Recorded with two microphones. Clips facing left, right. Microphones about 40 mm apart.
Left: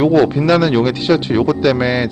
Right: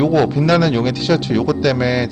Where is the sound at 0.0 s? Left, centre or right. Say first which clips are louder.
Left 2 dB; left.